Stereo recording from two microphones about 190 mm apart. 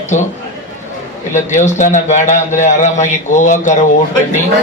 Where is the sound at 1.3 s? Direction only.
40° left (ahead or behind).